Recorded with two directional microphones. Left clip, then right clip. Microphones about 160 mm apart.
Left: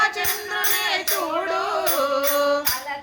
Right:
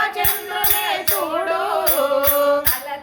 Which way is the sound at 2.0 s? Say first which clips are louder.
Right 3 dB; centre (ahead or behind).